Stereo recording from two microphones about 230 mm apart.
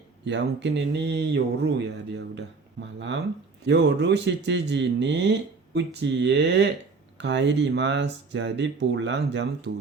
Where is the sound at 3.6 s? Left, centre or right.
Right.